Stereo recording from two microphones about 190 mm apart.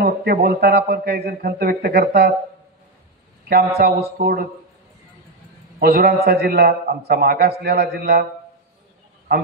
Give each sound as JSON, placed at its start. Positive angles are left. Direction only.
{"t": 0.0, "sound": "a man's voice", "side_deg": -55}
{"t": 3.4, "sound": "speech", "side_deg": -55}
{"t": 5.8, "sound": "a man's voice", "side_deg": -55}